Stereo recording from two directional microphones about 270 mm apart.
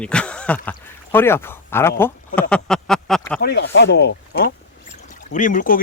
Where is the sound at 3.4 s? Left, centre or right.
Left.